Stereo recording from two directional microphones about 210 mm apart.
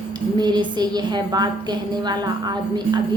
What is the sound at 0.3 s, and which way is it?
A woman's voice, 20° right (ahead or behind).